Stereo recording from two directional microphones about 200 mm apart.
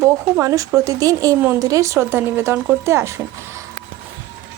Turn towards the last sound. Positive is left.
turn(degrees=-15)  # may be behind; listen again after turning